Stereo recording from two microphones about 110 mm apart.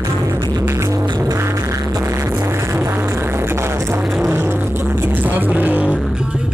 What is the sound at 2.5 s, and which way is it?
Music, 20° right (ahead or behind).